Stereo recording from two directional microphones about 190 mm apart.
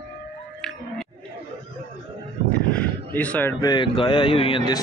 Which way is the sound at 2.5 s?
10° left (ahead or behind).